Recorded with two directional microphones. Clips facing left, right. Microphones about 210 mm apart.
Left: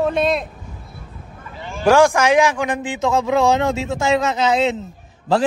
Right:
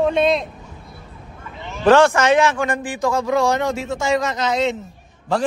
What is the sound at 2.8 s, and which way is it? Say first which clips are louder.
A man's voice: left 1 dB; 20° left (ahead or behind).